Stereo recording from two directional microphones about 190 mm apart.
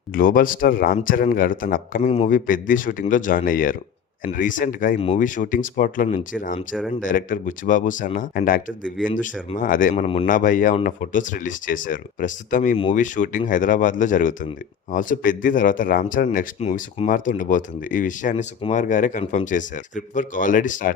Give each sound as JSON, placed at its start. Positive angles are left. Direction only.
{"t": 0.1, "sound": "speech", "side_deg": 50}
{"t": 2.0, "sound": "speech", "side_deg": 35}
{"t": 4.9, "sound": "speech", "side_deg": 30}
{"t": 5.2, "sound": "speech", "side_deg": 45}
{"t": 9.9, "sound": "speech", "side_deg": 30}
{"t": 10.2, "sound": "speech", "side_deg": 45}
{"t": 16.6, "sound": "speech", "side_deg": 35}
{"t": 19.2, "sound": "speech", "side_deg": 30}
{"t": 19.5, "sound": "speech", "side_deg": 40}